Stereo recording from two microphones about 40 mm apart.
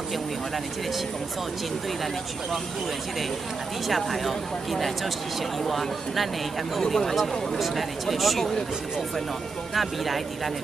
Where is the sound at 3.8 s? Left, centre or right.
Centre.